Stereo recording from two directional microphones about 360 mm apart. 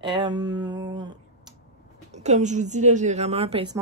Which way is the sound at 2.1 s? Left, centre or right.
Centre.